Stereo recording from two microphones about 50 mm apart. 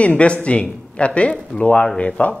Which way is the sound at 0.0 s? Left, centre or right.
Left.